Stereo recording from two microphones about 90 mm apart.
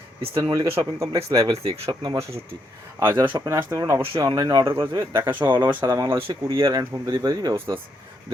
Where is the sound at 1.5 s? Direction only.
90° right.